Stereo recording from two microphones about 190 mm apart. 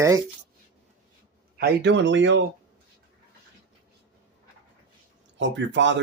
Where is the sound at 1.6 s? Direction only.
60° right (ahead or behind).